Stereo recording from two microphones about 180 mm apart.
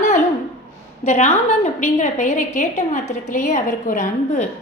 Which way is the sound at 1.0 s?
40° left (ahead or behind).